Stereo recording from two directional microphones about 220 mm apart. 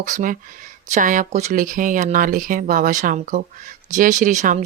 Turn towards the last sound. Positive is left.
turn(degrees=-35)  # may be behind; listen again after turning